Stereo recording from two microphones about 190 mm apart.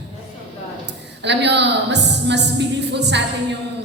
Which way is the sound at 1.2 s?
65° right (ahead or behind).